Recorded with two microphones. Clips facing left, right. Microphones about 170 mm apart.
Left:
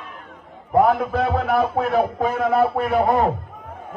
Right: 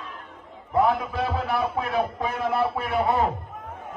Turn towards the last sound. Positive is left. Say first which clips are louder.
# left 5 dB
turn(degrees=45)  # may be behind; listen again after turning